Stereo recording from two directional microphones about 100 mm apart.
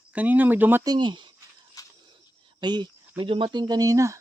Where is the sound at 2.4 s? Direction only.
50° right (ahead or behind); by 4.2 s 30° right (ahead or behind).